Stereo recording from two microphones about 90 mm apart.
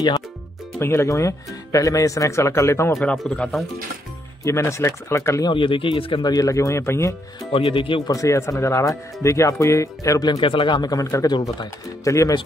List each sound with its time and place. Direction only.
0.7 s speech: 30° left (ahead or behind)
3.0 s speech: 10° left (ahead or behind)
4.5 s speech: 35° left (ahead or behind)
5.5 s speech: 70° left (ahead or behind)
6.2 s speech: 40° left (ahead or behind)
7.5 s speech: 80° left
8.1 s speech: 35° left (ahead or behind)
10.4 s speech: 65° left (ahead or behind); by 12.4 s 35° left (ahead or behind)